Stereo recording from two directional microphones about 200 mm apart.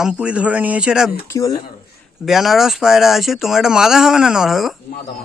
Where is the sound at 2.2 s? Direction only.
Centre (ahead or behind).